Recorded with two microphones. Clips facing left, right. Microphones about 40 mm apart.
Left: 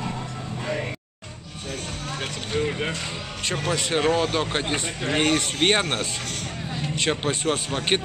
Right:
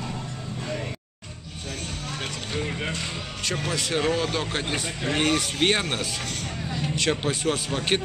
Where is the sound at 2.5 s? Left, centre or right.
Centre.